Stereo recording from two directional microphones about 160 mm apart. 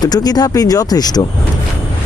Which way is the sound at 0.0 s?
25° left (ahead or behind).